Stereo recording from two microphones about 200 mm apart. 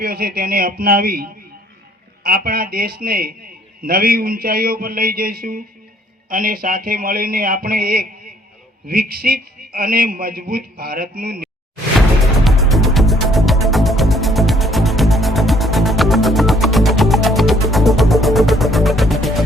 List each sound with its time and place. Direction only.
0.0 s a man's voice: 50° right (ahead or behind)
11.9 s music: centre (ahead or behind)